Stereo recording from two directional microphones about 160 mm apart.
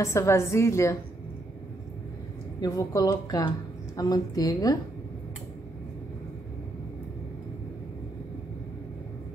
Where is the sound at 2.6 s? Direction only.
20° left (ahead or behind).